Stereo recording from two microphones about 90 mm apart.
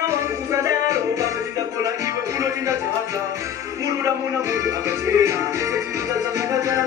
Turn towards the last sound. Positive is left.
turn(degrees=-40)  # may be behind; listen again after turning